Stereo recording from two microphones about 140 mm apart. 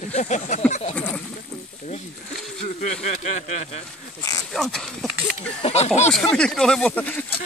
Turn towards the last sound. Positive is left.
turn(degrees=10)  # may be behind; listen again after turning